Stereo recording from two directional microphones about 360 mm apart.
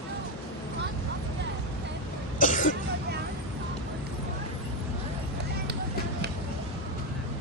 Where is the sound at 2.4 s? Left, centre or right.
Left.